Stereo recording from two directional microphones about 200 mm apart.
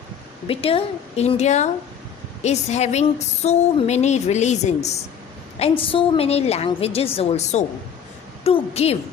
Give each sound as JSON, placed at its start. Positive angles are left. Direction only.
{"t": 0.4, "sound": "a woman's voice", "side_deg": 30}